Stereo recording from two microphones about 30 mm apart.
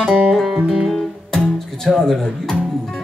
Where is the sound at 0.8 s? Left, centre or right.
Centre.